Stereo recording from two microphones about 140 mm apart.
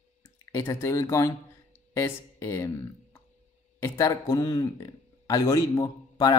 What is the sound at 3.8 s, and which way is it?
A man's voice, 20° left (ahead or behind).